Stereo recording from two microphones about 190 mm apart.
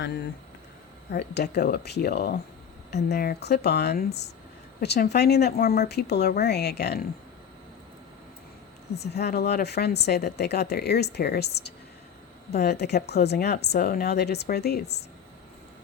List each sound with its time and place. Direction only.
1.1 s speech: 60° left (ahead or behind)
9.0 s speech: 60° left (ahead or behind)